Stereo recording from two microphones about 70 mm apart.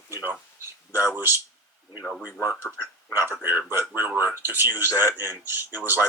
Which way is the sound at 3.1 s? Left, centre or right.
Right.